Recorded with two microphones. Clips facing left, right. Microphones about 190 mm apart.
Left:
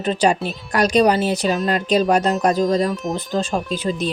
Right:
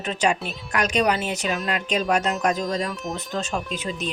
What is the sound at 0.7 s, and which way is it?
Speech, 35° left (ahead or behind).